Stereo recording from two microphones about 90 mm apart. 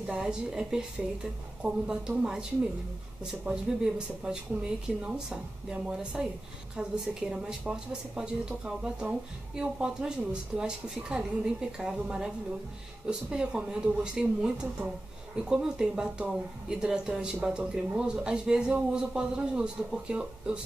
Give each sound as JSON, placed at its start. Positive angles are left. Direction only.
{"t": 0.0, "sound": "speech", "side_deg": -10}
{"t": 3.4, "sound": "speech", "side_deg": -10}